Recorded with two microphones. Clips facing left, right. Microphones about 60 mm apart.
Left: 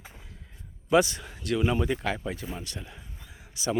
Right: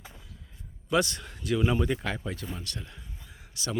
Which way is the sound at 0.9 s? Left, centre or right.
Centre.